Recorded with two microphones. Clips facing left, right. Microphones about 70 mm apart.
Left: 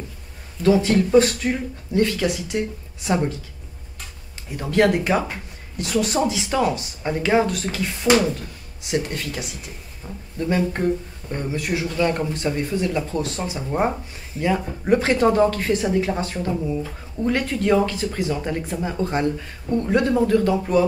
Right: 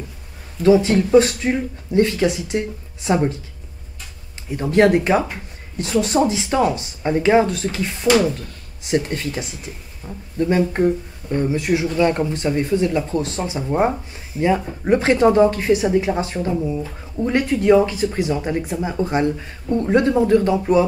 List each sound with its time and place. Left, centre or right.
0.7 s speech: centre
4.6 s speech: right
7.0 s speech: centre
7.2 s speech: right
10.0 s a woman's voice: centre
14.9 s a woman's voice: right